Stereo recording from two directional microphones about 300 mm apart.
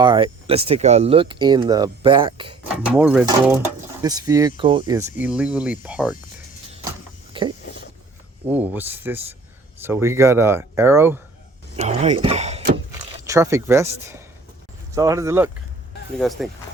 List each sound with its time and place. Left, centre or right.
0.0 s speech: centre
2.9 s speech: centre
7.3 s a sound: centre
8.5 s speech: centre
11.8 s speech: right
12.7 s vehicle: centre
14.9 s speech: centre